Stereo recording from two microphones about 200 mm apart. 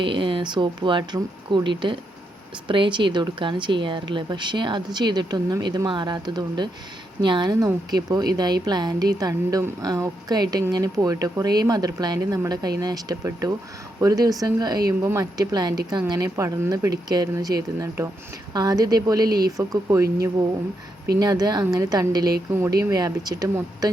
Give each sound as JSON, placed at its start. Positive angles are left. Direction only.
{"t": 0.0, "sound": "a woman's voice", "side_deg": -25}